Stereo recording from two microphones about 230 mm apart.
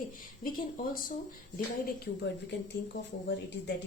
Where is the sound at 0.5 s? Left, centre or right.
Left.